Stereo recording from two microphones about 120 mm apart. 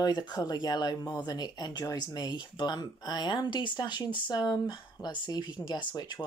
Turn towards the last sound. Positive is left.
turn(degrees=35)  # may be behind; listen again after turning